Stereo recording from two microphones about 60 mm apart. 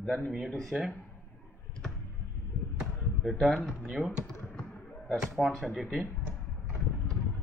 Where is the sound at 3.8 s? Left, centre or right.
Right.